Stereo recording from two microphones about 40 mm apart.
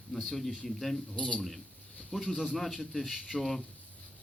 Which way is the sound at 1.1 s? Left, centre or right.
Left.